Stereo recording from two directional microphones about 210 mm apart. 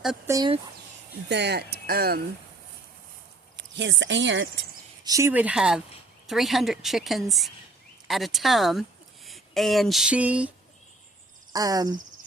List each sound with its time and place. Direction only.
0.3 s speech: 15° right (ahead or behind)
1.3 s speech: 55° right (ahead or behind)
3.6 s speech: 60° right (ahead or behind)
5.0 s a woman's voice: 15° right (ahead or behind)
11.5 s speech: 15° right (ahead or behind)